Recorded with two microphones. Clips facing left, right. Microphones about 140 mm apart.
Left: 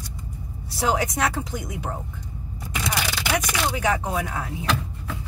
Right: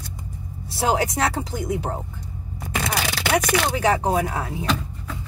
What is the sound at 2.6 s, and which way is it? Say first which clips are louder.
Scrape: right 2 dB; 55° right (ahead or behind).